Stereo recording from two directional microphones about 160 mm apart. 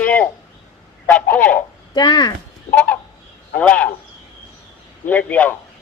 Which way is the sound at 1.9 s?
25° left (ahead or behind).